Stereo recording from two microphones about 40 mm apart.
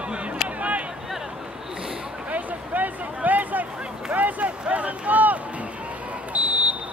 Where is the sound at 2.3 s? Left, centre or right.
Right.